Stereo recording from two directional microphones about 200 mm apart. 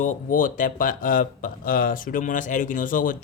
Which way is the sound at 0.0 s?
40° left (ahead or behind).